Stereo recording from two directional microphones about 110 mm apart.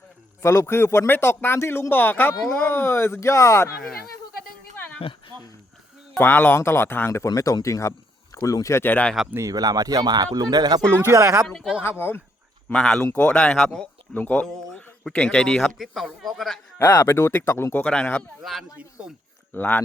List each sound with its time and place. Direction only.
0.4 s speech: 25° left (ahead or behind)
6.1 s speech: 15° left (ahead or behind)
8.8 s speech: 15° left (ahead or behind)
9.3 s speech: 30° right (ahead or behind)
11.4 s speech: 5° left (ahead or behind)
11.8 s speech: 20° left (ahead or behind)
12.6 s speech: 5° left (ahead or behind)
14.1 s speech: 15° left (ahead or behind)
14.4 s speech: 5° left (ahead or behind)
16.7 s speech: 20° left (ahead or behind)
17.8 s speech: 10° left (ahead or behind)
18.4 s speech: centre (ahead or behind)
19.5 s speech: 15° left (ahead or behind)